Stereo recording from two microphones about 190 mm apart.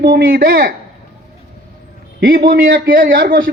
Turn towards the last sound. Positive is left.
turn(degrees=-50)  # may be behind; listen again after turning